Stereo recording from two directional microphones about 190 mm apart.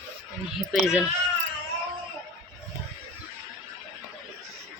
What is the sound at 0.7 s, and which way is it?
Speech, 5° right (ahead or behind).